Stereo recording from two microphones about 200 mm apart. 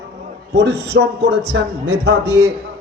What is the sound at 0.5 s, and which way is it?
Speech, 60° right (ahead or behind).